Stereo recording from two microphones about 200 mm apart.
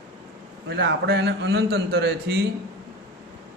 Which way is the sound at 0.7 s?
60° right (ahead or behind).